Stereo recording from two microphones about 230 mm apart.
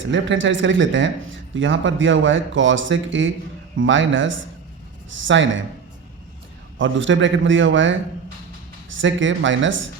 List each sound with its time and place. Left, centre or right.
0.1 s speech: right
6.7 s speech: right